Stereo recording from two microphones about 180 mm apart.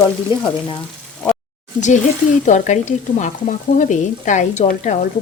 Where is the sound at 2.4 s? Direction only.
45° left (ahead or behind).